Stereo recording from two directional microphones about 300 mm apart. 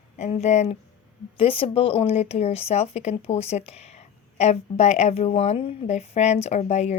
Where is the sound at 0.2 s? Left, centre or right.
Left.